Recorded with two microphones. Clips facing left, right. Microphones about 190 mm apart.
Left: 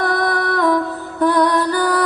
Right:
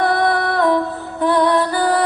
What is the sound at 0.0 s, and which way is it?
Music, 45° left (ahead or behind).